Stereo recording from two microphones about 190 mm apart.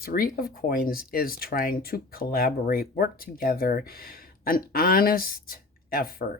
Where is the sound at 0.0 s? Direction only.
50° left (ahead or behind).